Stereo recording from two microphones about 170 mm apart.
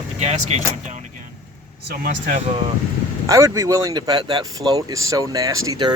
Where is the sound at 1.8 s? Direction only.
55° right (ahead or behind).